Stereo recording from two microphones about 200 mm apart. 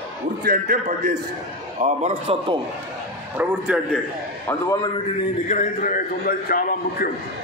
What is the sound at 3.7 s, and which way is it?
Speech, 5° right (ahead or behind).